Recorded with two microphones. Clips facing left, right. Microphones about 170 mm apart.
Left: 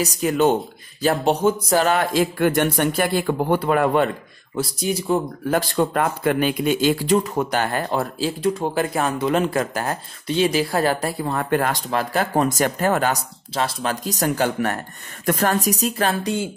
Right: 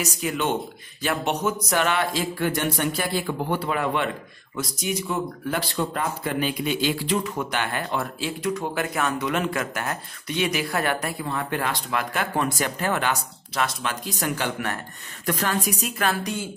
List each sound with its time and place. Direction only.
0.0 s speech: 40° left (ahead or behind)
4.6 s speech: 30° left (ahead or behind); by 11.8 s 50° left (ahead or behind)
11.9 s speech: 35° left (ahead or behind)